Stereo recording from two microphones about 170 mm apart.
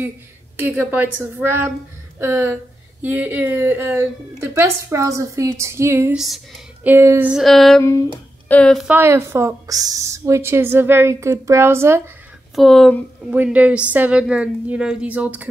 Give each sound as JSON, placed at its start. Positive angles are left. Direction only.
{"t": 0.6, "sound": "speech", "side_deg": -10}
{"t": 6.1, "sound": "speech", "side_deg": 0}
{"t": 6.9, "sound": "music", "side_deg": -15}
{"t": 8.8, "sound": "speech", "side_deg": -15}
{"t": 12.5, "sound": "music", "side_deg": 0}
{"t": 13.3, "sound": "speech", "side_deg": -10}